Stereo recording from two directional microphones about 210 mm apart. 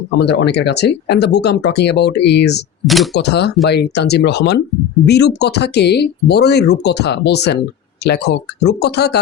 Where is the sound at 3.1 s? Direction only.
55° left (ahead or behind).